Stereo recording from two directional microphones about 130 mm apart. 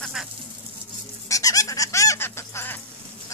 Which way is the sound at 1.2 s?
25° left (ahead or behind).